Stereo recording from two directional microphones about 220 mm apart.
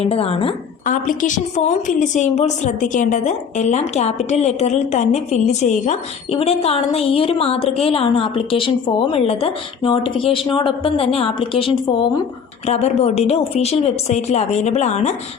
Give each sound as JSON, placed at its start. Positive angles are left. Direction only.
{"t": 0.0, "sound": "a woman's voice", "side_deg": 25}
{"t": 0.9, "sound": "a woman's voice", "side_deg": 35}